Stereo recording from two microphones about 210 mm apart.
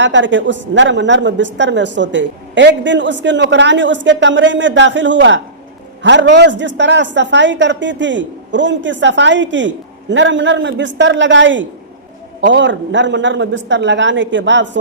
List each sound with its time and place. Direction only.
0.0 s a woman's voice: 60° right (ahead or behind)